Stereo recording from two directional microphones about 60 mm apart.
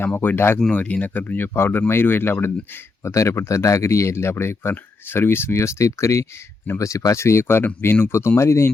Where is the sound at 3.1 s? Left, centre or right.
Left.